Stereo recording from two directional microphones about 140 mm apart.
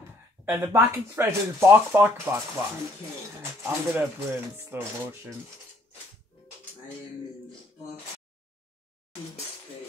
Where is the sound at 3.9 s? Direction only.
10° right (ahead or behind).